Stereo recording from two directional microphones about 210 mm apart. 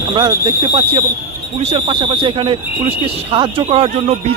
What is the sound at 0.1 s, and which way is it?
Speech, 20° right (ahead or behind).